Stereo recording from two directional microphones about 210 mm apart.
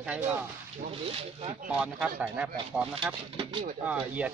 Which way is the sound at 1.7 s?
5° right (ahead or behind).